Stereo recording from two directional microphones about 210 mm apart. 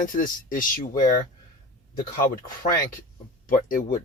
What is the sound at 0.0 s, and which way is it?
Speech, 40° left (ahead or behind).